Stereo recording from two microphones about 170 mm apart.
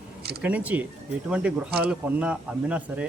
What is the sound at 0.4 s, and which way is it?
Speech, 10° right (ahead or behind).